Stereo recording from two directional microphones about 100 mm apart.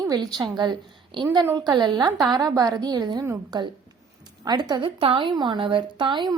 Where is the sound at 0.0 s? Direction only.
40° right (ahead or behind).